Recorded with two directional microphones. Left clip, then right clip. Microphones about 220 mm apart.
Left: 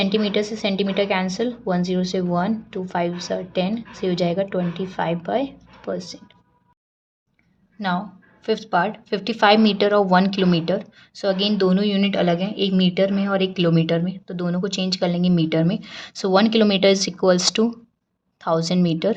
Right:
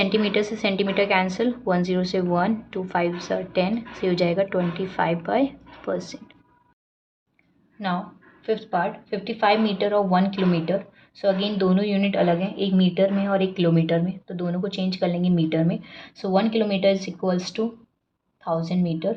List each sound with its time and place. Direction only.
0.0 s a woman's voice: 5° left (ahead or behind)
7.8 s a woman's voice: 20° left (ahead or behind); by 19.1 s 35° left (ahead or behind)